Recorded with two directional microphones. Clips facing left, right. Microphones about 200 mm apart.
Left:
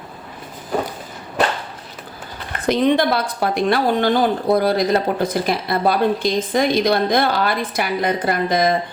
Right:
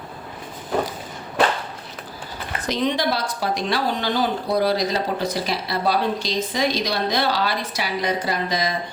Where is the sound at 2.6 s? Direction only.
55° left (ahead or behind).